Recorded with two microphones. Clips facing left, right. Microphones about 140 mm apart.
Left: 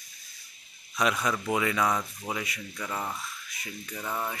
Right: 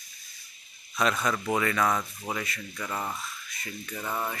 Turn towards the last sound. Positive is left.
turn(degrees=10)  # may be behind; listen again after turning